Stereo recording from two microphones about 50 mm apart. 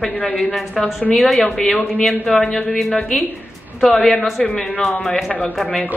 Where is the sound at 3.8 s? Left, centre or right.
Centre.